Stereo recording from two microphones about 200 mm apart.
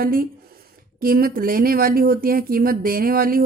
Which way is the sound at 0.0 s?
45° right (ahead or behind).